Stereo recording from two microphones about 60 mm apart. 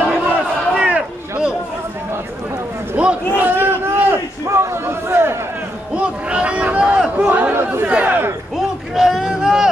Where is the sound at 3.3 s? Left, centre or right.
Right.